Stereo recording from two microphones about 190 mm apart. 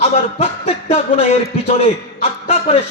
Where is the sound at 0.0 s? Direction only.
30° left (ahead or behind).